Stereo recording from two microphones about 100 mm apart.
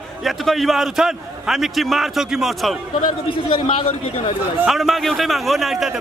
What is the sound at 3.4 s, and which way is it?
Speech, 60° left (ahead or behind).